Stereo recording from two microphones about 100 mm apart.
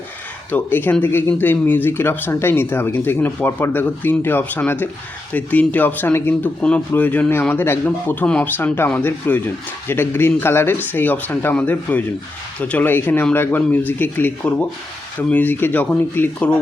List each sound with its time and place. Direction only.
0.5 s speech: 20° left (ahead or behind)